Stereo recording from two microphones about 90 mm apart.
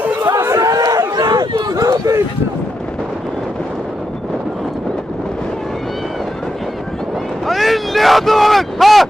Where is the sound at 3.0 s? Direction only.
5° right (ahead or behind).